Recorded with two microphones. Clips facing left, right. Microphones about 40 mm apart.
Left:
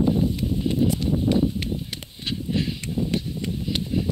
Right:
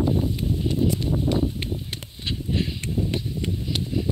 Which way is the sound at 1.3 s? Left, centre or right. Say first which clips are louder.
Left 3 dB; right.